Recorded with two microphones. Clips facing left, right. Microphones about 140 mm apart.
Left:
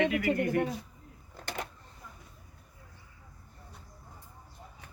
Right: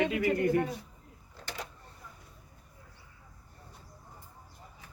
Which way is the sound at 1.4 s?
55° left (ahead or behind).